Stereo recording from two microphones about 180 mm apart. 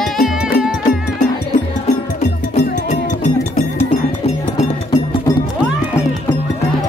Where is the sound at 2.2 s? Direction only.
40° left (ahead or behind).